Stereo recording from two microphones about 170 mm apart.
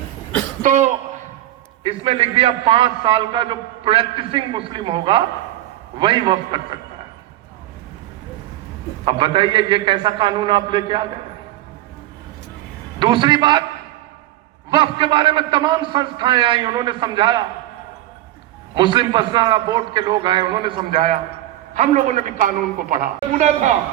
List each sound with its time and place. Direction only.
0.6 s speech: 45° right (ahead or behind)
1.8 s a man's voice: 35° right (ahead or behind)
9.0 s a man's voice: 30° right (ahead or behind)
13.0 s a man's voice: 25° right (ahead or behind)
14.7 s a man's voice: 30° right (ahead or behind)
18.7 s a man's voice: 25° right (ahead or behind)
20.9 s a man's voice: 55° right (ahead or behind)